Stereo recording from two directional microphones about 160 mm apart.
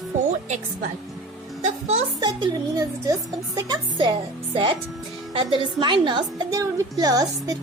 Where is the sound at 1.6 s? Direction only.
40° right (ahead or behind).